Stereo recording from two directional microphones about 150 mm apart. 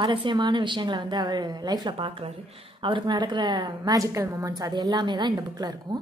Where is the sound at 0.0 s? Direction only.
35° right (ahead or behind).